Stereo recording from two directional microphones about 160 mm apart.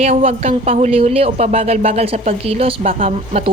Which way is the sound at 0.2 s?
40° right (ahead or behind).